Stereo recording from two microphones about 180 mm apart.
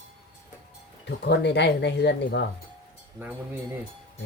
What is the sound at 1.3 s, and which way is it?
Speech, 70° left (ahead or behind).